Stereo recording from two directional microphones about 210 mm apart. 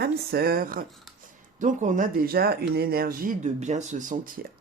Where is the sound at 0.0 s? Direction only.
45° right (ahead or behind).